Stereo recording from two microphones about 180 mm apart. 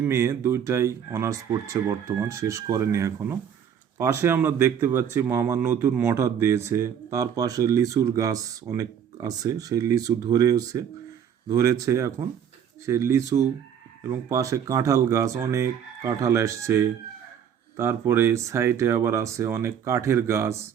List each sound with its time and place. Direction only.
0.0 s a man's voice: 15° right (ahead or behind)